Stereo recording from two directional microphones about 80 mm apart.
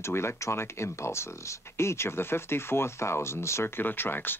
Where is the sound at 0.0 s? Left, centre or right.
Left.